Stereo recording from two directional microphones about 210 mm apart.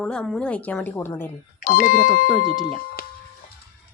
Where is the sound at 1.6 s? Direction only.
40° left (ahead or behind).